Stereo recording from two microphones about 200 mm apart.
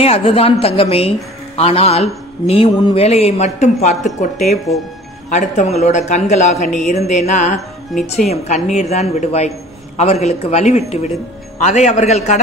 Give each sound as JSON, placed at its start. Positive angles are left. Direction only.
{"t": 0.0, "sound": "a woman's voice", "side_deg": 30}